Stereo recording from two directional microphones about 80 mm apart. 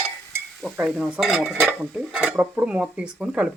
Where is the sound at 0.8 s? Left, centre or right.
Centre.